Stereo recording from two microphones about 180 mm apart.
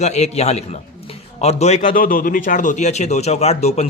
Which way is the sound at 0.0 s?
40° left (ahead or behind).